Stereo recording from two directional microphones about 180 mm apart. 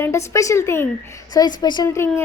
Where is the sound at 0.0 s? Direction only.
15° left (ahead or behind).